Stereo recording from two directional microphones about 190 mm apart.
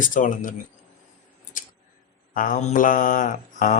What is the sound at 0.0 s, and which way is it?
Speech, 45° left (ahead or behind).